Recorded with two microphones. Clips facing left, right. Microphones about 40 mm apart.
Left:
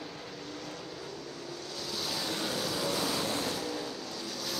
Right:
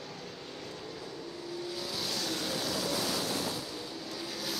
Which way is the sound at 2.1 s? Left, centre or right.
Centre.